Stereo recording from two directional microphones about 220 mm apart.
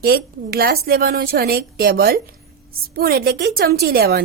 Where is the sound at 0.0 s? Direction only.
45° right (ahead or behind).